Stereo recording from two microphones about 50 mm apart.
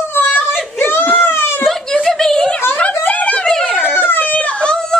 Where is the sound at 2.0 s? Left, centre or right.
Centre.